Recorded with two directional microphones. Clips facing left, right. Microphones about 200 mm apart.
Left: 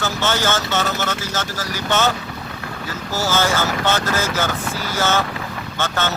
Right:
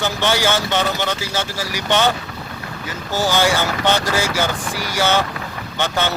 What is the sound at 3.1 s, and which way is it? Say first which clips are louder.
Speech: right 2 dB; 15° right (ahead or behind).